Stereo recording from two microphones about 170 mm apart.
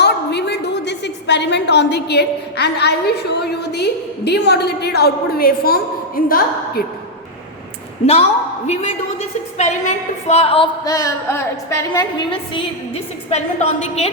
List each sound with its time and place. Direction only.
0.0 s a woman's voice: 85° left; by 6.8 s 60° left (ahead or behind)
8.0 s a woman's voice: 40° left (ahead or behind)
10.8 s a woman's voice: 20° left (ahead or behind)
12.3 s a woman's voice: 35° left (ahead or behind)